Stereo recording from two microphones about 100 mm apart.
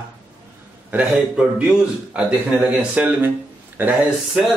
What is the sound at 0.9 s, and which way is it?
A man's voice, 10° right (ahead or behind).